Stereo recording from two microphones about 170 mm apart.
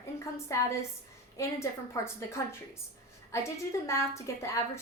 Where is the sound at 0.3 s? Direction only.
15° left (ahead or behind).